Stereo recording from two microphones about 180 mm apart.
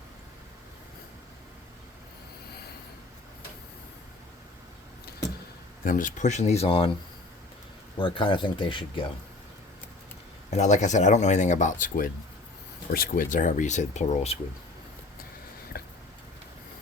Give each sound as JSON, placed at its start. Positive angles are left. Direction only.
{"t": 5.8, "sound": "speech", "side_deg": 50}
{"t": 7.9, "sound": "speech", "side_deg": 25}
{"t": 10.5, "sound": "speech", "side_deg": 40}
{"t": 15.7, "sound": "a sound", "side_deg": 55}